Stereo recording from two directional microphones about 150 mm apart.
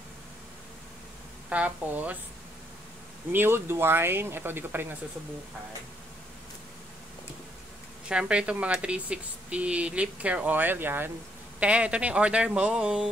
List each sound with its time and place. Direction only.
1.5 s speech: 10° right (ahead or behind)
3.3 s speech: 15° right (ahead or behind)
8.1 s speech: 5° right (ahead or behind)